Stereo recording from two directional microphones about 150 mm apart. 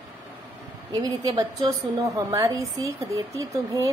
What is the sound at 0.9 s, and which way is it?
A woman's voice, 25° right (ahead or behind).